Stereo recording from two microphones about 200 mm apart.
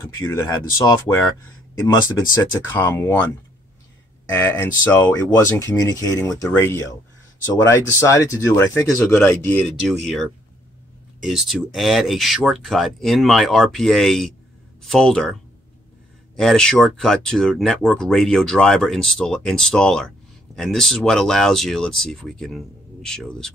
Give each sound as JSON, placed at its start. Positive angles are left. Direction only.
{"t": 0.3, "sound": "speech", "side_deg": 15}
{"t": 2.7, "sound": "speech", "side_deg": 10}
{"t": 4.3, "sound": "speech", "side_deg": 10}
{"t": 11.2, "sound": "speech", "side_deg": 0}
{"t": 16.3, "sound": "speech", "side_deg": 5}